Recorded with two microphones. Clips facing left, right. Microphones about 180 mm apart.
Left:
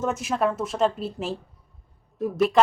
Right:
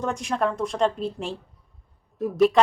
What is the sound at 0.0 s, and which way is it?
Speech, 5° left (ahead or behind).